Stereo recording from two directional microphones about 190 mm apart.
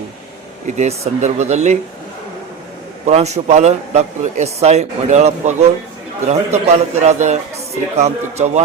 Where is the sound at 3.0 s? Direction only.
35° right (ahead or behind).